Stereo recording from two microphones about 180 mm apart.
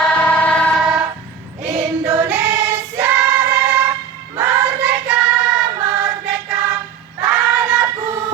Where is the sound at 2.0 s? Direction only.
15° right (ahead or behind).